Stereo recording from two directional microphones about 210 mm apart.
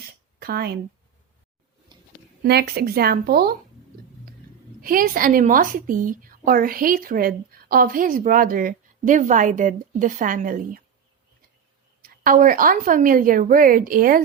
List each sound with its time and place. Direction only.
0.3 s speech: 45° right (ahead or behind)
2.4 s speech: 50° right (ahead or behind)
4.8 s a woman's voice: 45° right (ahead or behind)
12.0 s a woman's voice: 40° right (ahead or behind)